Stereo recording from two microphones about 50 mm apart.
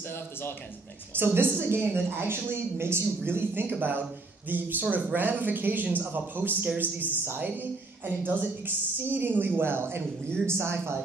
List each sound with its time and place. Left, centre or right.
0.1 s speech: left
1.1 s a woman's voice: right